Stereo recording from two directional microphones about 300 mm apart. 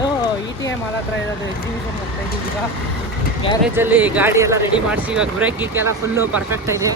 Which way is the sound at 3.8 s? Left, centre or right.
Centre.